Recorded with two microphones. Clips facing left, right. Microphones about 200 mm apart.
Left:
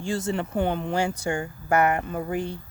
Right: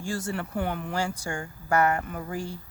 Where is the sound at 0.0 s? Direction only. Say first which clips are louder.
Left 4 dB; 20° left (ahead or behind).